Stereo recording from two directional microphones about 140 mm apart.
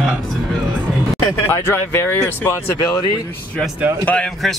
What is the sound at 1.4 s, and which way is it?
Speech, 15° left (ahead or behind).